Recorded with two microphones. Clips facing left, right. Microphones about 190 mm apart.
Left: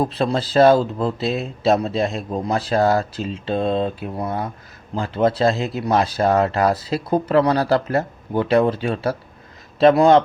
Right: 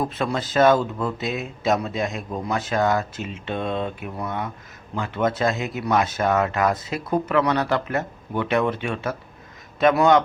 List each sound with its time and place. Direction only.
0.0 s speech: 30° left (ahead or behind)